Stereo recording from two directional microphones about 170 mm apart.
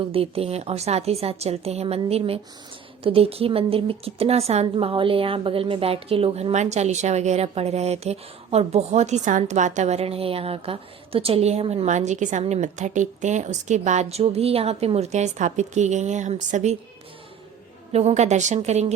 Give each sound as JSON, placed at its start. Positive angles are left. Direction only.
{"t": 0.0, "sound": "a woman's voice", "side_deg": -35}
{"t": 17.9, "sound": "a woman's voice", "side_deg": -40}